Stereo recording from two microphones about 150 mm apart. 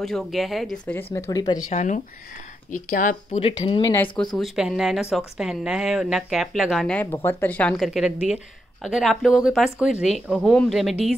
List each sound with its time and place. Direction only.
0.0 s a woman's voice: centre (ahead or behind)
1.1 s speech: 20° left (ahead or behind)
1.7 s speech: 50° left (ahead or behind)
3.3 s speech: 35° left (ahead or behind)
4.4 s a woman's voice: 5° right (ahead or behind)
7.1 s a woman's voice: 15° left (ahead or behind); by 11.0 s centre (ahead or behind)